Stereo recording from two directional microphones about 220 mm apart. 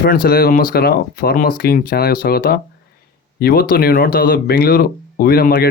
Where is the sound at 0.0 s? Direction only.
40° left (ahead or behind).